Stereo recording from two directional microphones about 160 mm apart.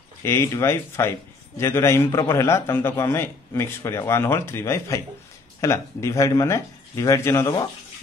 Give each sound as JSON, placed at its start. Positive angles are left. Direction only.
{"t": 0.2, "sound": "a man's voice", "side_deg": 15}